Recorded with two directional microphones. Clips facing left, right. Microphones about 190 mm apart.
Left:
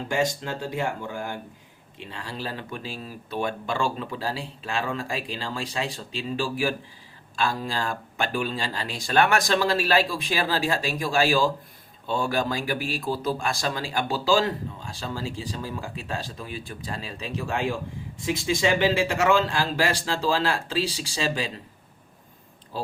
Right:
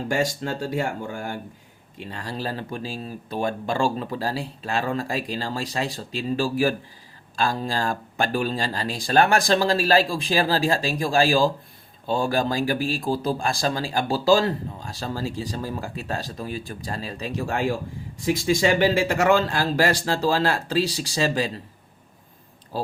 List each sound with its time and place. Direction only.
0.1 s speech: 45° right (ahead or behind)